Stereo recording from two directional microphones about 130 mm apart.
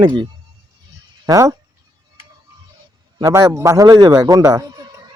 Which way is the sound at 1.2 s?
25° right (ahead or behind).